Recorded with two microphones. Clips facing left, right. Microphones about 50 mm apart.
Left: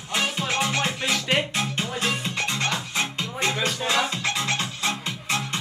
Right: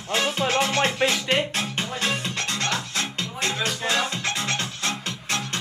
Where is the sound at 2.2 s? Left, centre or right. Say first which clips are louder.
Left 1 dB; centre.